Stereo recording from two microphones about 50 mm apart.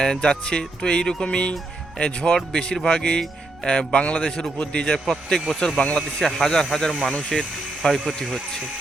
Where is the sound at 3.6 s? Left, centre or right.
Centre.